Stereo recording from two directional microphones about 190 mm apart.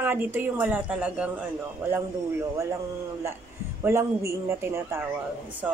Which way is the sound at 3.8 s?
15° right (ahead or behind).